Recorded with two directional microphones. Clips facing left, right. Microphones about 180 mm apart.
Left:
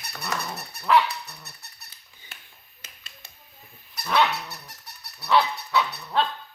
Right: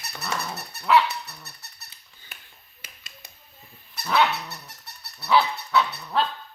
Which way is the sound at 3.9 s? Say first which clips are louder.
Right 1 dB; 5° right (ahead or behind).